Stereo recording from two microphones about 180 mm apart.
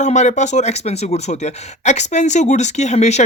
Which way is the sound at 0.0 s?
40° left (ahead or behind).